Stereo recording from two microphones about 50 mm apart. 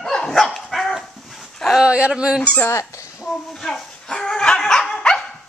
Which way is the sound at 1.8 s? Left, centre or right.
Right.